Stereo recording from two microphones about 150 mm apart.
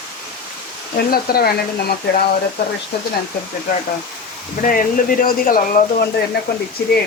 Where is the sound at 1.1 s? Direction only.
90° left.